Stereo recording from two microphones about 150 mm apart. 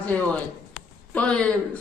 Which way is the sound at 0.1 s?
10° left (ahead or behind).